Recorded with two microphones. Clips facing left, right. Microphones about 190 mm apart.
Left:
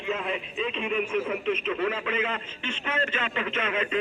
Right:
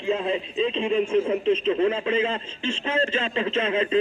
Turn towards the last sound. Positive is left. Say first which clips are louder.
# right 6 dB
turn(degrees=-30)  # may be behind; listen again after turning